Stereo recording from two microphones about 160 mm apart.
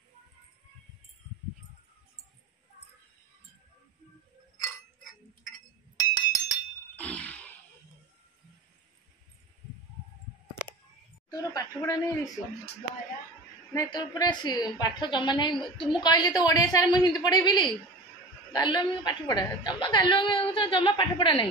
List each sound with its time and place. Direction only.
5.9 s chink: 25° left (ahead or behind)
7.0 s a sound: 10° left (ahead or behind)
11.2 s a woman's voice: 25° left (ahead or behind)
13.7 s a woman's voice: 25° left (ahead or behind)